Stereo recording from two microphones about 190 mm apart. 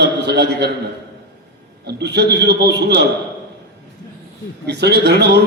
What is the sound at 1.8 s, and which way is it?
A man's voice, 60° right (ahead or behind).